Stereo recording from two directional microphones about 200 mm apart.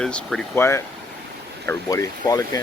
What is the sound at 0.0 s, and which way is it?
Speech, 5° left (ahead or behind).